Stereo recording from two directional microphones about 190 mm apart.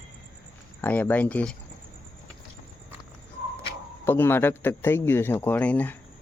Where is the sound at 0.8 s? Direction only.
10° left (ahead or behind).